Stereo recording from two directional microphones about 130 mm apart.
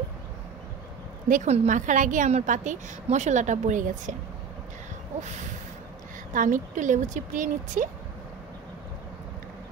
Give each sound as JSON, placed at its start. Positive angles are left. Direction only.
{"t": 1.3, "sound": "a woman's voice", "side_deg": -60}
{"t": 6.3, "sound": "speech", "side_deg": -85}